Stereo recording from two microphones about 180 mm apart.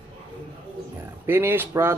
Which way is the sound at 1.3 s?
10° right (ahead or behind).